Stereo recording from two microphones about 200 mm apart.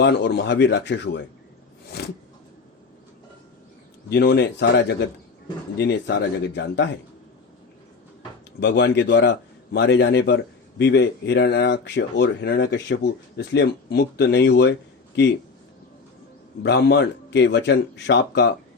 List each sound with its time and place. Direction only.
0.0 s a man's voice: 60° left (ahead or behind)
2.0 s a sound: 55° left (ahead or behind)
4.1 s a man's voice: 55° left (ahead or behind)
8.6 s a man's voice: 60° left (ahead or behind)
16.6 s a man's voice: 55° left (ahead or behind)